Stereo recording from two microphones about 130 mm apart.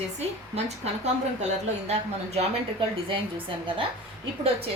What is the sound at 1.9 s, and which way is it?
Speech, 55° right (ahead or behind).